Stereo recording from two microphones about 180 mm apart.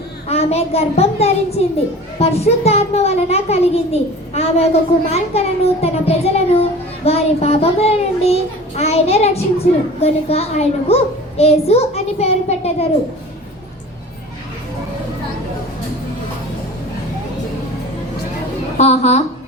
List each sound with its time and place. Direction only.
0.3 s a child's voice: 35° left (ahead or behind)
18.8 s a child's voice: 40° left (ahead or behind)